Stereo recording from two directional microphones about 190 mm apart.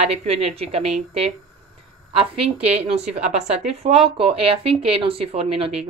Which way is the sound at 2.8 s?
35° right (ahead or behind).